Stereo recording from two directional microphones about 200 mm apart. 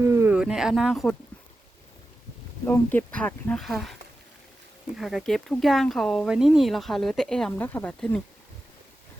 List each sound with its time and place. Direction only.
0.0 s speech: 15° right (ahead or behind)
2.6 s speech: 10° left (ahead or behind)
4.9 s speech: centre (ahead or behind)